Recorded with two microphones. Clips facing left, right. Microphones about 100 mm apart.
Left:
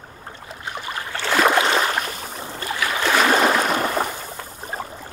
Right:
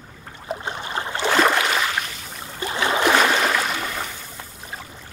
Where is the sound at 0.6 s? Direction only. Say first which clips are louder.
Left 1 dB; 25° right (ahead or behind).